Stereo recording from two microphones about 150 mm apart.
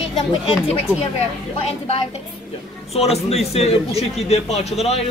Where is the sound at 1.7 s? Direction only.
45° left (ahead or behind).